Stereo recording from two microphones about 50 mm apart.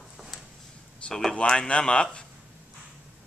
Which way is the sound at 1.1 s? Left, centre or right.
Centre.